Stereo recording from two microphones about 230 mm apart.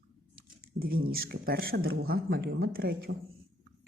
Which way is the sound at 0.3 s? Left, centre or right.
Right.